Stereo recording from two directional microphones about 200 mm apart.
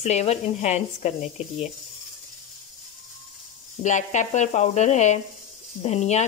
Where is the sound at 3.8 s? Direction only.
35° left (ahead or behind).